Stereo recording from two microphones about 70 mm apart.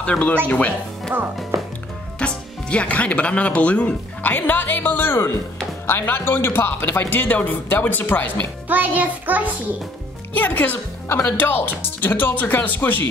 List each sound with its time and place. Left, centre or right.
0.0 s speech: centre
2.1 s speech: centre
8.6 s music: right
10.3 s speech: left